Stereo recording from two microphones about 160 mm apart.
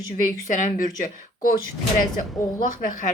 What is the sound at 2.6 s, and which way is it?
Speech, 55° left (ahead or behind).